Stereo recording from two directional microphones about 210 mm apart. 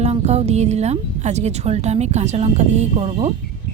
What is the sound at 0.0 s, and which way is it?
Speech, 30° right (ahead or behind).